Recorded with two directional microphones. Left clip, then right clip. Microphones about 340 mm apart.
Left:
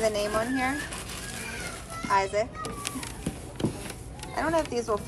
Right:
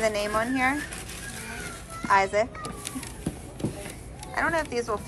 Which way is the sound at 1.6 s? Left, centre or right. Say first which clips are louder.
Even; centre.